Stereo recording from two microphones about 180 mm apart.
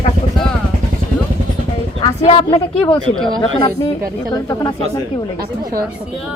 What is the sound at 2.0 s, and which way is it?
Speech, 30° left (ahead or behind).